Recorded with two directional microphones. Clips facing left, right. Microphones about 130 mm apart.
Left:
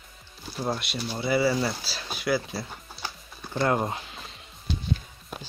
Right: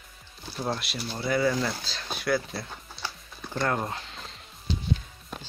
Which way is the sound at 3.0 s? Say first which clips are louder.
Right 1 dB; 15° left (ahead or behind).